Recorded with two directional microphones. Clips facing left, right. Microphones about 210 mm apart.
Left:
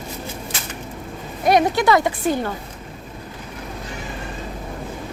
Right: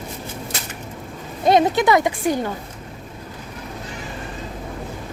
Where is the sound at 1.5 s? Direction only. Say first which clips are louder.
Right 1 dB; 20° right (ahead or behind).